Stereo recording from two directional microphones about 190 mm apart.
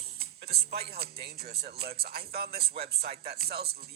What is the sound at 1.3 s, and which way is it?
Speech, 55° right (ahead or behind).